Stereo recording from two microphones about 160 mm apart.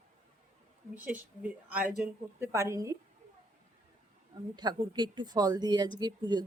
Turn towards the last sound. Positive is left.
turn(degrees=-30)  # may be behind; listen again after turning